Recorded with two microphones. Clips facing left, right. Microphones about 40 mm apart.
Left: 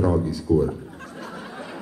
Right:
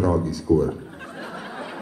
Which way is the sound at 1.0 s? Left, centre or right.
Right.